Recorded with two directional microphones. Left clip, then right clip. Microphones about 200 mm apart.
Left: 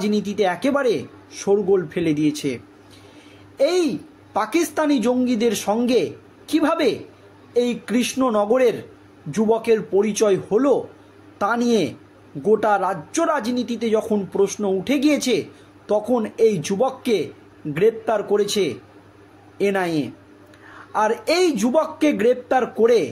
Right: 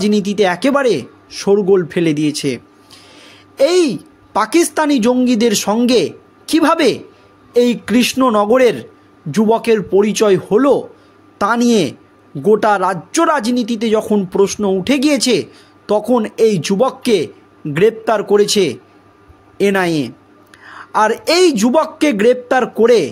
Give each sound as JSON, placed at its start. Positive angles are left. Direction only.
{"t": 0.0, "sound": "speech", "side_deg": -45}